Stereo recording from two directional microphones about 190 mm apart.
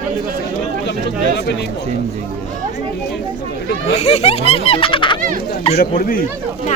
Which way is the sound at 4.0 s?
35° left (ahead or behind).